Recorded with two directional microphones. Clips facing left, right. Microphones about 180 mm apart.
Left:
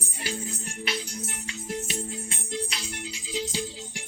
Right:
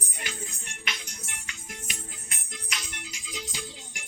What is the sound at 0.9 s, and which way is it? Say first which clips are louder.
Music: left 7 dB; 30° left (ahead or behind).